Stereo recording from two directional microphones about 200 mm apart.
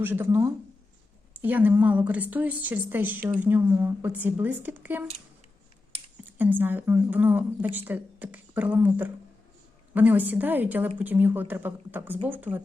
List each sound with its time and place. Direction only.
0.0 s speech: 10° right (ahead or behind)
6.2 s speech: 10° right (ahead or behind)